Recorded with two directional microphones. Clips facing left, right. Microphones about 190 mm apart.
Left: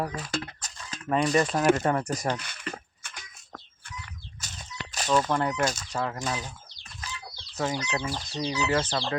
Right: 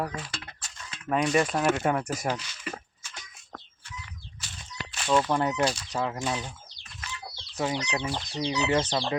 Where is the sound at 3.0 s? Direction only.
60° left (ahead or behind).